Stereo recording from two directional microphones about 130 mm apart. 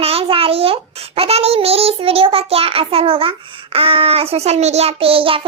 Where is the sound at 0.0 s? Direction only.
50° right (ahead or behind).